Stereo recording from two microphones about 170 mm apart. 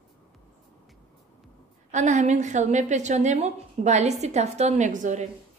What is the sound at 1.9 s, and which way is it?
A woman's voice, 45° right (ahead or behind).